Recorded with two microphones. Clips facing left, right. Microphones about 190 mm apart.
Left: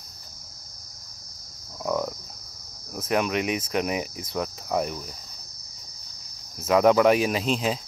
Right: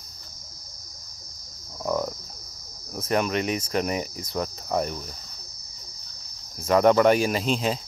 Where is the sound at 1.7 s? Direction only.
Centre (ahead or behind).